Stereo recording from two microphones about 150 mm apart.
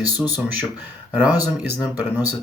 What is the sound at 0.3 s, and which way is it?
Speech, 10° right (ahead or behind).